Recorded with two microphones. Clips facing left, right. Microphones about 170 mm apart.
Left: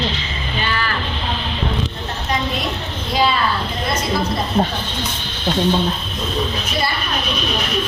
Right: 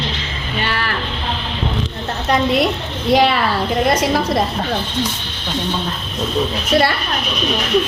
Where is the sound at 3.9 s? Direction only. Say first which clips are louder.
Right 2 dB; 85° right.